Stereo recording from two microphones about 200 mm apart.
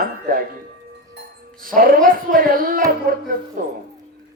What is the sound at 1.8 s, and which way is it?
A man's voice, 40° right (ahead or behind).